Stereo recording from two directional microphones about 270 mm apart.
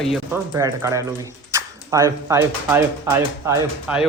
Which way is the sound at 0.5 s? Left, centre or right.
Centre.